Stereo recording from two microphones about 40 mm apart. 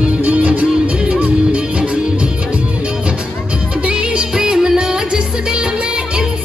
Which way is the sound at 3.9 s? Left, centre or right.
Right.